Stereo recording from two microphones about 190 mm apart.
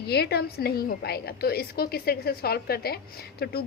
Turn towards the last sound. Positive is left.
turn(degrees=55)  # may be behind; listen again after turning